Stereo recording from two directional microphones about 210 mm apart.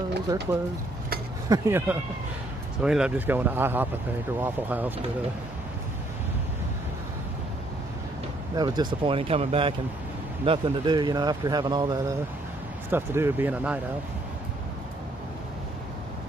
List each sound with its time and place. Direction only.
1.5 s speech: 10° right (ahead or behind)
8.5 s speech: 20° right (ahead or behind)